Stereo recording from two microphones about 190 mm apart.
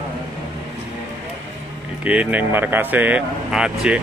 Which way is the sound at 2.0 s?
5° right (ahead or behind).